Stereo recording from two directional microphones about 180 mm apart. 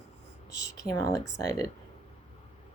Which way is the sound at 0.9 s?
20° left (ahead or behind).